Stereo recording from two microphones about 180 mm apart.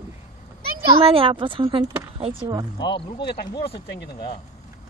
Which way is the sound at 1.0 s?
30° right (ahead or behind).